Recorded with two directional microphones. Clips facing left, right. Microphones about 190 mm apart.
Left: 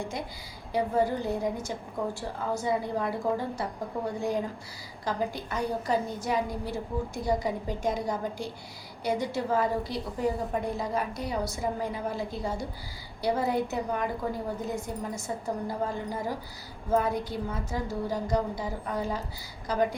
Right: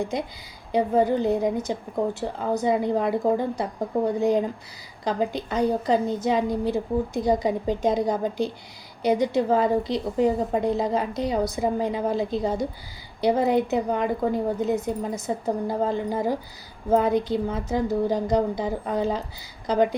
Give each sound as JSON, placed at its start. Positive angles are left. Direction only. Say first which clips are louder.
{"t": 0.1, "sound": "a woman's voice", "louder": "right 7 dB", "side_deg": -20}